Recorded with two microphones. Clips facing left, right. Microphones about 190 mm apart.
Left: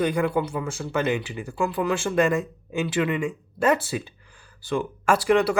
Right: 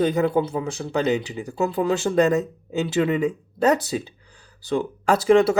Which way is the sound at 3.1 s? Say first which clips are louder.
Right 4 dB; 40° right (ahead or behind).